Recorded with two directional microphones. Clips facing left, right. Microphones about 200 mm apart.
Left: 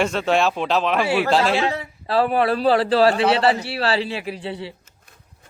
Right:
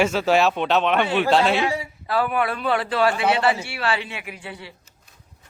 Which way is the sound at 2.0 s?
30° left (ahead or behind).